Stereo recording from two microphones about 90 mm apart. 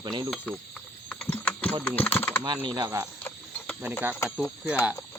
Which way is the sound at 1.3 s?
15° left (ahead or behind).